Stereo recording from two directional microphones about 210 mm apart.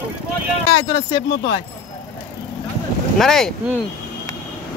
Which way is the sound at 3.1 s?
Centre (ahead or behind).